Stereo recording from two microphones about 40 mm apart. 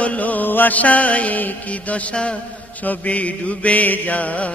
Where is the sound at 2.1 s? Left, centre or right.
Left.